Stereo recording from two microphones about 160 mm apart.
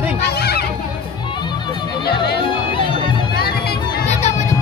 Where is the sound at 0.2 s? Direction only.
90° left.